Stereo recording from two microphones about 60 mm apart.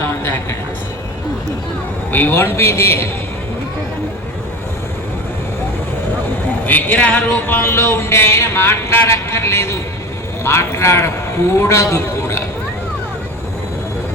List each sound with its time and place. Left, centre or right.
2.3 s speech: left
6.7 s speech: left
7.4 s speech: left